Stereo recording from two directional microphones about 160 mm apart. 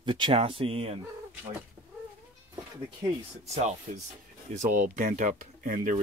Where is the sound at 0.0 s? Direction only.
30° right (ahead or behind).